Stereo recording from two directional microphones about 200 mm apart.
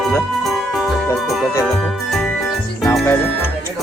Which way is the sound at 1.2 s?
Centre (ahead or behind).